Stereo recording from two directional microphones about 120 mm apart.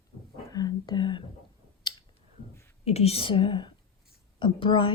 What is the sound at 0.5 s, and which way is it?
Speech, 35° left (ahead or behind).